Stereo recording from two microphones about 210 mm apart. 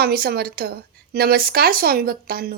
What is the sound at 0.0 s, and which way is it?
Speech, 45° right (ahead or behind).